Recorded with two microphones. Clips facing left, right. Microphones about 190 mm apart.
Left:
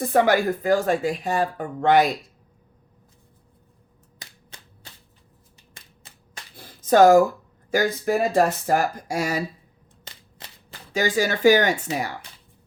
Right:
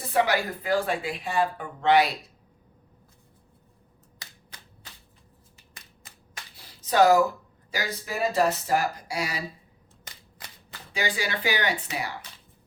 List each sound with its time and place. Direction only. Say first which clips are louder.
0.0 s speech: left 6 dB; 50° left (ahead or behind)
4.5 s typewriter: left 3 dB; 25° left (ahead or behind)
5.7 s typewriter: left 1 dB; 30° left (ahead or behind)
6.6 s a sound: left 6 dB; 50° left (ahead or behind)
7.7 s speech: left 11 dB; 50° left (ahead or behind)
10.0 s a sound: left 2 dB; 25° left (ahead or behind)
10.9 s speech: left 7 dB; 45° left (ahead or behind)